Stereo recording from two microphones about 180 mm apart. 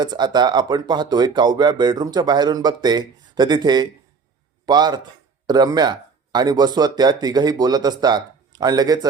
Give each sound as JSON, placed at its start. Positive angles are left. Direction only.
{"t": 0.0, "sound": "speech", "side_deg": -25}